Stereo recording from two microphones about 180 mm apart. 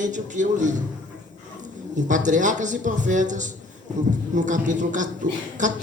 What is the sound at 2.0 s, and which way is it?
A man's voice, 45° right (ahead or behind).